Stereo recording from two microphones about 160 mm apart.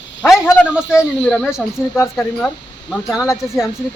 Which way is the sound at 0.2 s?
Centre (ahead or behind).